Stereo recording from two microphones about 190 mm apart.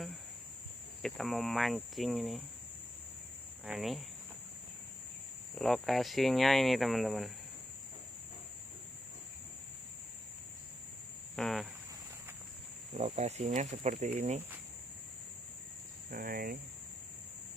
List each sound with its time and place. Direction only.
1.0 s speech: centre (ahead or behind)
3.6 s speech: centre (ahead or behind)
5.5 s speech: centre (ahead or behind)
11.3 s speech: centre (ahead or behind)
13.0 s cricket: 35° right (ahead or behind)
16.0 s cricket: 50° right (ahead or behind)